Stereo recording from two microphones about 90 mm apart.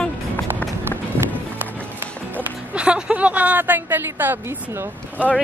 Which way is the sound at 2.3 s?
15° right (ahead or behind).